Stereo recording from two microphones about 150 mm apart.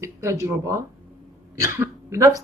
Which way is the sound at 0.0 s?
20° right (ahead or behind).